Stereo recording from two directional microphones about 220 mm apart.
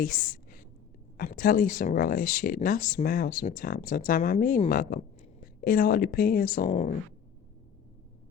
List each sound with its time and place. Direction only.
0.0 s speech: 35° left (ahead or behind)